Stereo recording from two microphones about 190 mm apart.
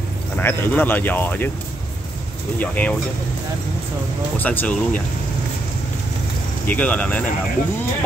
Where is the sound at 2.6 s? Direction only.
10° left (ahead or behind).